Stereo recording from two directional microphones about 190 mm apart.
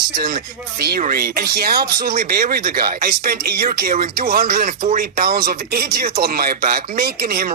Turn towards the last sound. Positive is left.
turn(degrees=-50)  # may be behind; listen again after turning